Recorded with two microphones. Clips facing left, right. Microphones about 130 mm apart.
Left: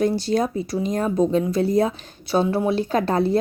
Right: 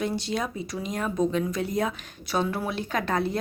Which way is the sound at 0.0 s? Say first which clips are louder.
Left 8 dB; 40° left (ahead or behind).